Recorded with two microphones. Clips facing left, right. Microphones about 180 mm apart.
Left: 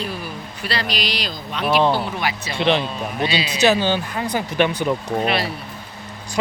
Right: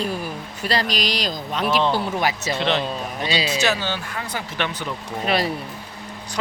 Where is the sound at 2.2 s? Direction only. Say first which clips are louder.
Right 3 dB; 40° right (ahead or behind).